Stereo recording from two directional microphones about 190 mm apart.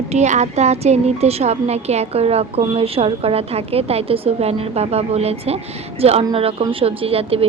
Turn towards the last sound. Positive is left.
turn(degrees=-30)  # may be behind; listen again after turning